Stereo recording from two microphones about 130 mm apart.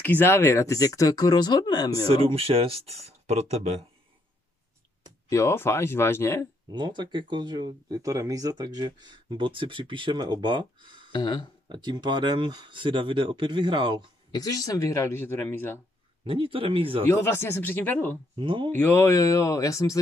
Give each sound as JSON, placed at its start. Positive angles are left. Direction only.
{"t": 0.0, "sound": "speech", "side_deg": 15}
{"t": 2.0, "sound": "speech", "side_deg": -45}
{"t": 5.3, "sound": "speech", "side_deg": 20}
{"t": 6.7, "sound": "speech", "side_deg": -35}
{"t": 11.1, "sound": "speech", "side_deg": 35}
{"t": 11.7, "sound": "speech", "side_deg": -35}
{"t": 14.3, "sound": "speech", "side_deg": 30}
{"t": 16.3, "sound": "speech", "side_deg": -45}
{"t": 17.1, "sound": "speech", "side_deg": 20}
{"t": 18.4, "sound": "speech", "side_deg": -40}
{"t": 18.8, "sound": "speech", "side_deg": 20}